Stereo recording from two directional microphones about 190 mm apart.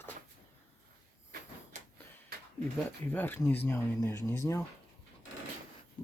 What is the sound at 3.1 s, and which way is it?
Speech, 10° left (ahead or behind).